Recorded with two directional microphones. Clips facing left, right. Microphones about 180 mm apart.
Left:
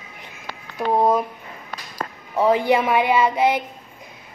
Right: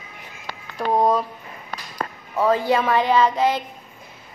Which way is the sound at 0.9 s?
5° left (ahead or behind).